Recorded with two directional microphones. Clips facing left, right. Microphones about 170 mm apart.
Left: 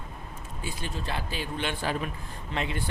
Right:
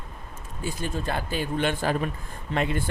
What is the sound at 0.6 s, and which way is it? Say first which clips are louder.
Speech: right 6 dB; 45° right (ahead or behind).